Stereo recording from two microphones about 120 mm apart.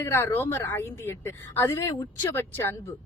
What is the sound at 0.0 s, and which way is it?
A woman's voice, 20° left (ahead or behind).